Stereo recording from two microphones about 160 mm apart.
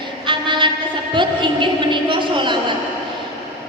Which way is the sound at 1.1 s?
30° right (ahead or behind).